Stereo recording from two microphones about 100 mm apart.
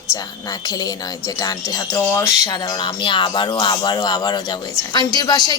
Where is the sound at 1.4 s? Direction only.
40° left (ahead or behind).